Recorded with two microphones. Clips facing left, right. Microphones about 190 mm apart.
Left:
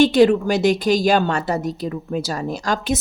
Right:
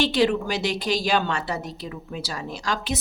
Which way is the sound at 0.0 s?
45° left (ahead or behind).